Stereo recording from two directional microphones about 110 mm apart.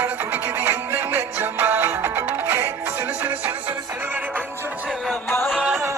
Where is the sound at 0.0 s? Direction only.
20° right (ahead or behind).